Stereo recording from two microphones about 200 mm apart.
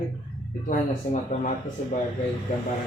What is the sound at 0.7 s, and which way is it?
Speech, 35° left (ahead or behind).